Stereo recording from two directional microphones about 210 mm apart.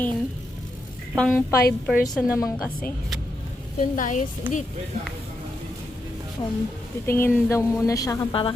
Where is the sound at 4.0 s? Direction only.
35° left (ahead or behind).